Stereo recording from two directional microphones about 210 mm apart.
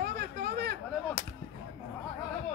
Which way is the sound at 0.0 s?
50° right (ahead or behind).